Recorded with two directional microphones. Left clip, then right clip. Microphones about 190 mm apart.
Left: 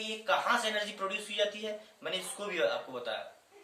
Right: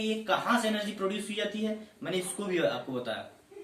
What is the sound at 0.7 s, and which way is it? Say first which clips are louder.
Speech: right 1 dB; centre (ahead or behind).